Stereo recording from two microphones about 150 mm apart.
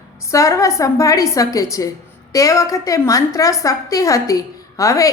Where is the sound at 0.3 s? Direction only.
20° left (ahead or behind).